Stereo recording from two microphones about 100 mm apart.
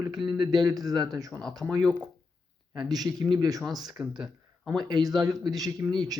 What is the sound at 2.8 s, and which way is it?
Speech, 40° right (ahead or behind).